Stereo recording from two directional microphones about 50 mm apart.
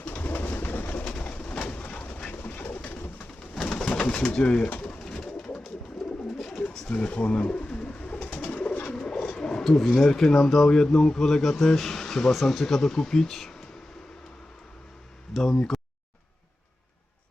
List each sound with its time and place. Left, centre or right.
0.0 s bird: left
1.0 s bird: left
2.0 s train: left
2.4 s bird: left
3.6 s bird: centre
4.3 s speech: centre
4.8 s bird: centre
6.6 s pigeon: left
6.9 s speech: left
7.9 s bird: left
9.0 s wild animals: centre
9.7 s speech: centre
15.3 s speech: centre